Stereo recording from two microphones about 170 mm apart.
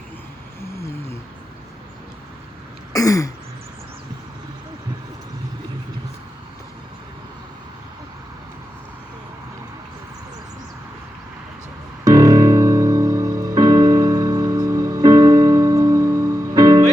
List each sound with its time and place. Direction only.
0.6 s a sound: 15° left (ahead or behind)
2.9 s throat clearing: 20° left (ahead or behind)
12.0 s music: 20° right (ahead or behind)